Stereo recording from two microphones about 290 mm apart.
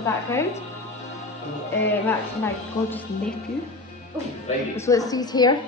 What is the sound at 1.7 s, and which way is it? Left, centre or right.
A woman's voice, centre.